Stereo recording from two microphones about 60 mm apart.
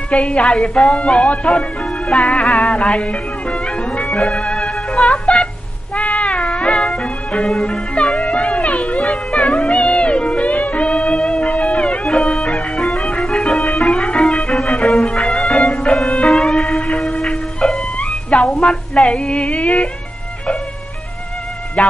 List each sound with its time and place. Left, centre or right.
0.1 s a woman's voice: centre
3.5 s music: centre
21.8 s a woman's voice: left